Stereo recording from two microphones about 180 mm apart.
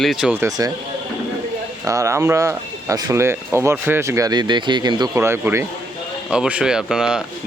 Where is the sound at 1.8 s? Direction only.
15° right (ahead or behind).